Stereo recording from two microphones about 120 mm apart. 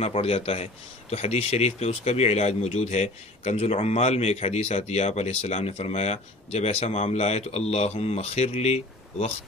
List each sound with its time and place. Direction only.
0.0 s speech: 60° left (ahead or behind)